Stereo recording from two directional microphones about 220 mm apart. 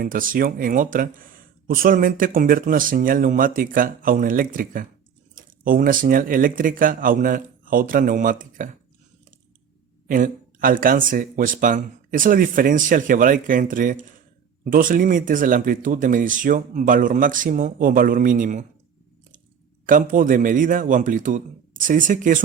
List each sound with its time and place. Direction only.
0.0 s speech: 40° right (ahead or behind)
10.1 s speech: 40° right (ahead or behind)
19.8 s speech: 40° right (ahead or behind)